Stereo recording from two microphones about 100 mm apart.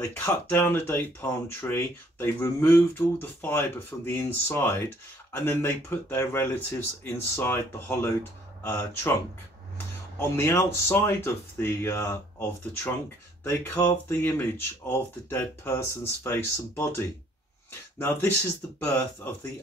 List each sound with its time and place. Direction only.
0.0 s speech: 25° left (ahead or behind)
10.1 s speech: 25° left (ahead or behind)